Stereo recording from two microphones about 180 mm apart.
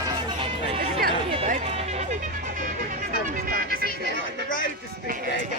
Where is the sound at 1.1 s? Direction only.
30° right (ahead or behind).